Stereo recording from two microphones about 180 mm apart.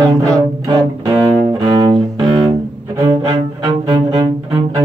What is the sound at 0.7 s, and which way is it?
Cello, 25° right (ahead or behind).